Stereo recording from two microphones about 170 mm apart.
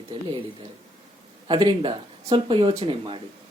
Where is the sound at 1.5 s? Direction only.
30° right (ahead or behind).